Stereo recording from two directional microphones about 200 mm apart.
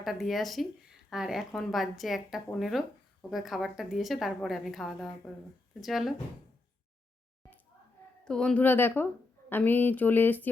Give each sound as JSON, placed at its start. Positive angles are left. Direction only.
{"t": 0.0, "sound": "speech", "side_deg": 0}
{"t": 7.4, "sound": "a sound", "side_deg": 15}
{"t": 8.2, "sound": "speech", "side_deg": 5}